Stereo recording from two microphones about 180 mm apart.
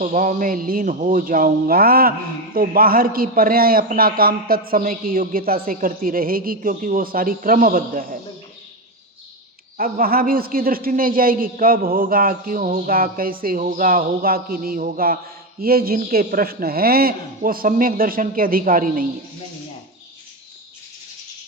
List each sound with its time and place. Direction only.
0.0 s a man's voice: 45° right (ahead or behind)
9.7 s a man's voice: 55° right (ahead or behind)